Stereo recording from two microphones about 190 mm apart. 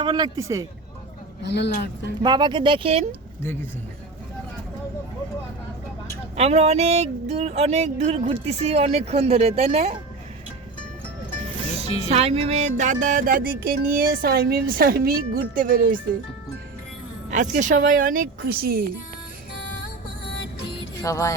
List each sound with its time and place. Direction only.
0.0 s speech: 25° right (ahead or behind)
1.5 s speech: 65° left (ahead or behind)
2.2 s speech: 25° right (ahead or behind)
6.3 s a sound: 35° right (ahead or behind)
11.9 s speech: 30° left (ahead or behind)
12.1 s music: 35° right (ahead or behind)
17.3 s a sound: 40° right (ahead or behind)
17.8 s music: 45° right (ahead or behind)
21.0 s music: 15° left (ahead or behind)